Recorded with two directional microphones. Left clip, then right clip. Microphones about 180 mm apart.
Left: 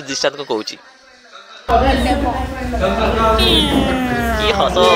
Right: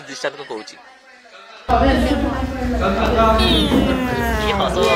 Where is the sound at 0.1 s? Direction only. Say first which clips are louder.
Left 7 dB; 35° left (ahead or behind).